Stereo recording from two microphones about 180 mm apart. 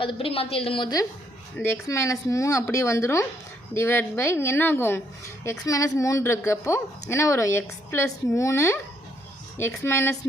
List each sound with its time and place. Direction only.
0.0 s a woman's voice: 30° left (ahead or behind)
1.5 s a woman's voice: 15° left (ahead or behind)